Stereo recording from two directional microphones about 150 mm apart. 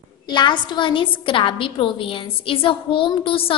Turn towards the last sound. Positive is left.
turn(degrees=35)  # may be behind; listen again after turning